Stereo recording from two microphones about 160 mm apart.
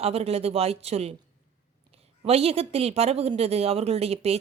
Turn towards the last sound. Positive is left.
turn(degrees=-40)  # may be behind; listen again after turning